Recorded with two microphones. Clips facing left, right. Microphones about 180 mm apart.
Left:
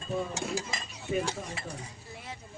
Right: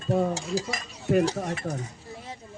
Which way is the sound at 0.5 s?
40° right (ahead or behind).